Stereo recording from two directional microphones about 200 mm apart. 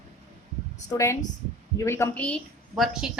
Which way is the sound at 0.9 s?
15° left (ahead or behind).